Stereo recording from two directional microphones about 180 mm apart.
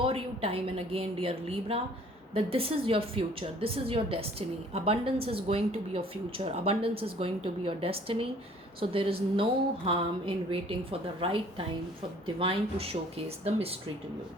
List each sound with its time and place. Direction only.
0.0 s a woman's voice: 30° right (ahead or behind)